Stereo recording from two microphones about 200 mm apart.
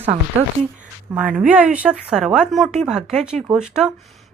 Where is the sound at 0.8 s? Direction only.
5° right (ahead or behind).